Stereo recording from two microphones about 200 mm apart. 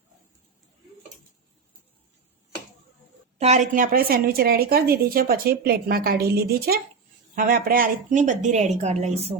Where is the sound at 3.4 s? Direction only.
35° right (ahead or behind).